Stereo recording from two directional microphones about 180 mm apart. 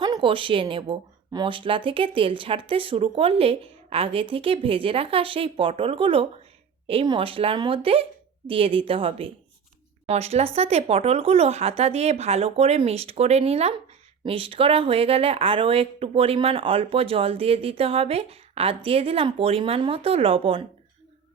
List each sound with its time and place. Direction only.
0.0 s speech: 25° right (ahead or behind)